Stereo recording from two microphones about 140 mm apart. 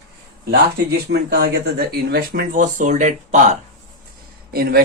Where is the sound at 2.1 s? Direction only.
90° right; by 3.6 s 60° right (ahead or behind).